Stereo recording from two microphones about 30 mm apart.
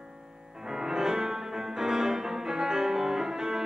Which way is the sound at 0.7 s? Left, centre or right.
Centre.